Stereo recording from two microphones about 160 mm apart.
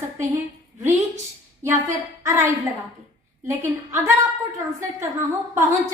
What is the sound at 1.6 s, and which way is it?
Speech, 20° right (ahead or behind).